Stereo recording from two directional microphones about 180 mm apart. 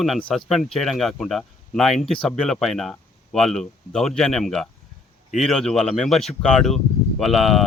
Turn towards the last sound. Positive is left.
turn(degrees=0)  # may be behind; listen again after turning